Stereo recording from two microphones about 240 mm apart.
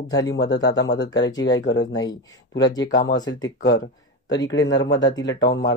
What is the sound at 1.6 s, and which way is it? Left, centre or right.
Speech, left.